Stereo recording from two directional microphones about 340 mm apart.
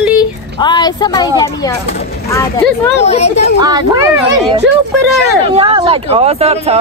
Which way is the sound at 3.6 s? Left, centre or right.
Centre.